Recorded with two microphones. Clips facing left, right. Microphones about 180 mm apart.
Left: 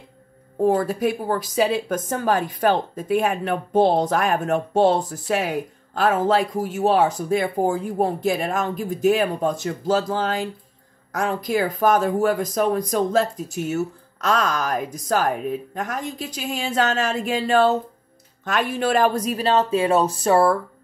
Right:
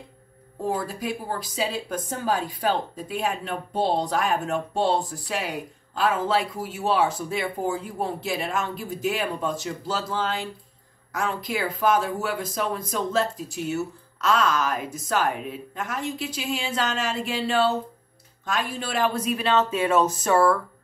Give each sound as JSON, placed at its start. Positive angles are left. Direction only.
{"t": 0.6, "sound": "a woman's voice", "side_deg": 55}
{"t": 2.6, "sound": "speech", "side_deg": 50}
{"t": 18.4, "sound": "speech", "side_deg": 65}